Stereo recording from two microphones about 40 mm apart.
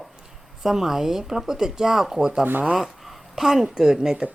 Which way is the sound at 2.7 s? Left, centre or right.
Centre.